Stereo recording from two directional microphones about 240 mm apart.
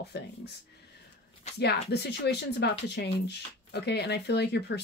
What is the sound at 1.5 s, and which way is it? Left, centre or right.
Speech, left.